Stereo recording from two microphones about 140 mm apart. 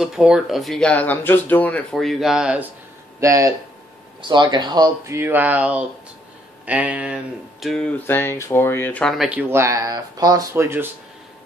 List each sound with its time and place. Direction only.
0.0 s speech: 5° right (ahead or behind)
3.2 s speech: 20° right (ahead or behind)
4.2 s speech: 35° right (ahead or behind); by 7.2 s 10° right (ahead or behind)
7.6 s speech: 5° left (ahead or behind)
9.2 s speech: 10° right (ahead or behind)